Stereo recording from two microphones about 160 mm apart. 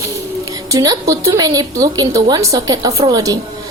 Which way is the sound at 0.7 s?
20° right (ahead or behind).